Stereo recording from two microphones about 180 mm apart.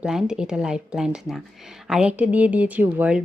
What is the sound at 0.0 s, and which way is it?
Speech, 5° right (ahead or behind).